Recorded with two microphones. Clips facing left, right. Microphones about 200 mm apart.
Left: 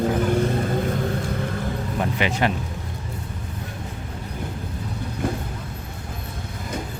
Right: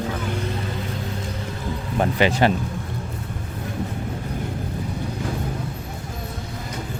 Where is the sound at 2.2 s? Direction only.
35° right (ahead or behind).